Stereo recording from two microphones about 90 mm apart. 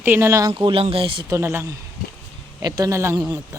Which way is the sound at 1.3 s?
30° right (ahead or behind).